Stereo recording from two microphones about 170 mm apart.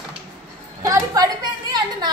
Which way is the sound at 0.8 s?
20° right (ahead or behind).